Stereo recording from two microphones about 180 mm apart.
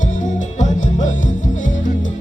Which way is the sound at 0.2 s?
45° left (ahead or behind).